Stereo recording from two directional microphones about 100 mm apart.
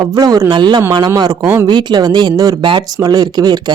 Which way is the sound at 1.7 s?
45° right (ahead or behind).